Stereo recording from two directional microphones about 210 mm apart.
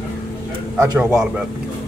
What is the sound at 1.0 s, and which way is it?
Speech, 5° right (ahead or behind).